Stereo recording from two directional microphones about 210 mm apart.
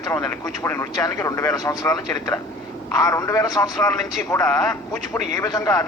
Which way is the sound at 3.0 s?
15° left (ahead or behind).